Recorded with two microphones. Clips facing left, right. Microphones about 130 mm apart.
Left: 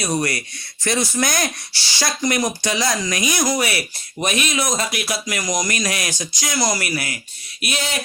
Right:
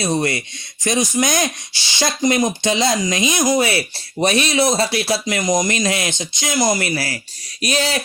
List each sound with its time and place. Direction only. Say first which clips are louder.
0.0 s speech: right 3 dB; 25° right (ahead or behind)